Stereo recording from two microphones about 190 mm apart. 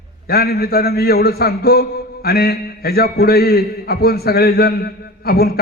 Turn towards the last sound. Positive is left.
turn(degrees=55)  # may be behind; listen again after turning